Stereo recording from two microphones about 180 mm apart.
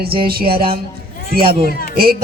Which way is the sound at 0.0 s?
55° right (ahead or behind).